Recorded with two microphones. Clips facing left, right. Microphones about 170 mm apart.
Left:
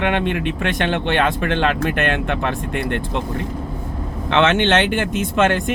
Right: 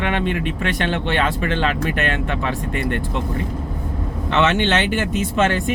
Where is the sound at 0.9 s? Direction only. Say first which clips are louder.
Left 2 dB; 60° left (ahead or behind).